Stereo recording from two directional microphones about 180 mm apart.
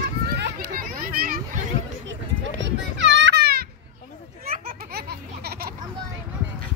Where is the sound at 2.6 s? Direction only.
85° right; by 3.7 s 60° right (ahead or behind).